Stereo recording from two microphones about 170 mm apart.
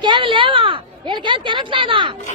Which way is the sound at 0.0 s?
30° right (ahead or behind).